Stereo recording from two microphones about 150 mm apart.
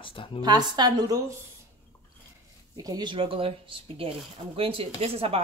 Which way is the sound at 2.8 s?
25° right (ahead or behind).